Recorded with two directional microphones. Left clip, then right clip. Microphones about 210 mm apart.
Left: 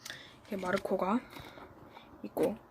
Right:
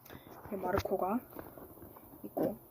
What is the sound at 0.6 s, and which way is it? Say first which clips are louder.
Speech: left 1 dB; 30° left (ahead or behind).